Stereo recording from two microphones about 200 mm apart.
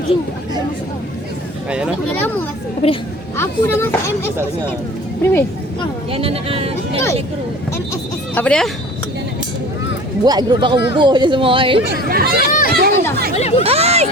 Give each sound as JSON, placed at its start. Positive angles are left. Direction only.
{"t": 2.1, "sound": "speech", "side_deg": 10}
{"t": 2.8, "sound": "speech", "side_deg": 30}
{"t": 3.3, "sound": "speech", "side_deg": 10}
{"t": 6.1, "sound": "speech", "side_deg": -30}
{"t": 8.4, "sound": "speech", "side_deg": 5}
{"t": 10.2, "sound": "speech", "side_deg": -20}
{"t": 12.0, "sound": "speech", "side_deg": -50}
{"t": 12.5, "sound": "a child's voice", "side_deg": 45}
{"t": 12.7, "sound": "a child's voice", "side_deg": -50}
{"t": 13.3, "sound": "speech", "side_deg": 35}
{"t": 13.7, "sound": "speech", "side_deg": -30}